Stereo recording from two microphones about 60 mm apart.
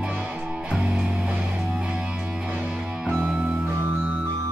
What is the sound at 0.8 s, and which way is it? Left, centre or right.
Music, centre.